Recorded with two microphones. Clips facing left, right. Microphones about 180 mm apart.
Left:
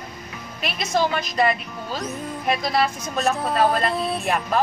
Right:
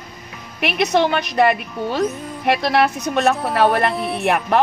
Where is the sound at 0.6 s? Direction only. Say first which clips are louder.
Right 6 dB; 70° right (ahead or behind).